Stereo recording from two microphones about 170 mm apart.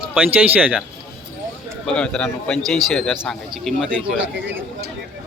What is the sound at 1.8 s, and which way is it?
A man's voice, 5° left (ahead or behind).